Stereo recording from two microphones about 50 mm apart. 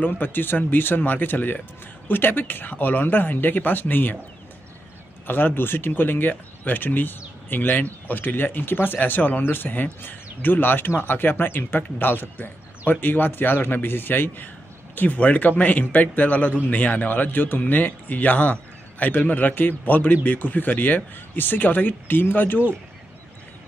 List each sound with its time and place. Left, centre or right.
0.0 s a man's voice: left
5.2 s a man's voice: left
15.0 s a man's voice: left